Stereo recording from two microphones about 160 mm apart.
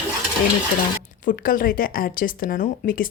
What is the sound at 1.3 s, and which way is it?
Speech, 60° left (ahead or behind).